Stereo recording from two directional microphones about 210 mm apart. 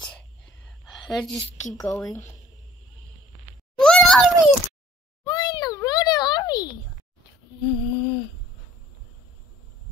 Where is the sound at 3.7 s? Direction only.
5° left (ahead or behind).